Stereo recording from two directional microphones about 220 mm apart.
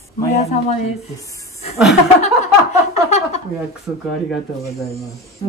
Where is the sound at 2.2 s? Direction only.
30° left (ahead or behind).